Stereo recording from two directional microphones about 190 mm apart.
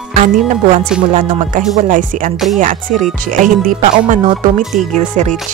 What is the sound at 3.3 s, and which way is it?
Music, 40° right (ahead or behind).